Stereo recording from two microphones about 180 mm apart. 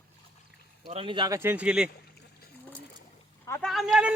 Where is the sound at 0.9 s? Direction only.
30° right (ahead or behind); by 1.9 s 5° right (ahead or behind).